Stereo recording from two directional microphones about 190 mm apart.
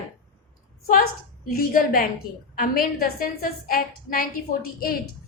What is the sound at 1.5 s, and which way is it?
A woman's voice, 50° left (ahead or behind).